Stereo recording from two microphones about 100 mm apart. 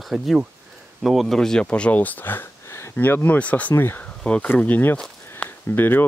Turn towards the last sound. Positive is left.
turn(degrees=20)  # may be behind; listen again after turning